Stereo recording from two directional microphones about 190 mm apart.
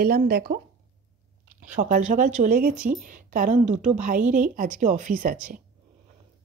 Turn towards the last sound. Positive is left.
turn(degrees=-45)  # may be behind; listen again after turning